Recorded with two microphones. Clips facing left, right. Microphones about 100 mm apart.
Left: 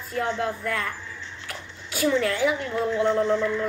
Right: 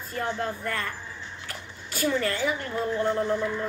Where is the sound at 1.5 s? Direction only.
Centre (ahead or behind).